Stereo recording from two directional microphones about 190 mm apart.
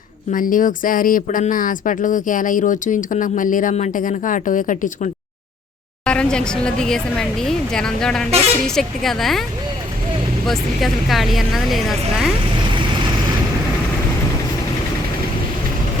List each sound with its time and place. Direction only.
0.3 s speech: 45° left (ahead or behind)
6.1 s speech: 5° left (ahead or behind)
10.4 s speech: centre (ahead or behind)